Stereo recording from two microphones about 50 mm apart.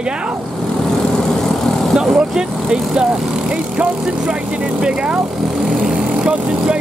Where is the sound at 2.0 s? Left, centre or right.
Centre.